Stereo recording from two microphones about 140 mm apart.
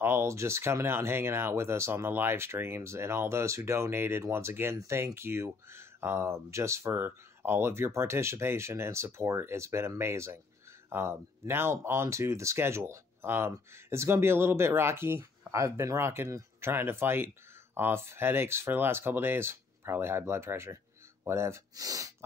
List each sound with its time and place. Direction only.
0.0 s speech: 20° right (ahead or behind)